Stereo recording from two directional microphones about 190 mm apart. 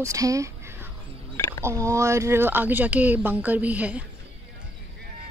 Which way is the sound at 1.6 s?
15° right (ahead or behind).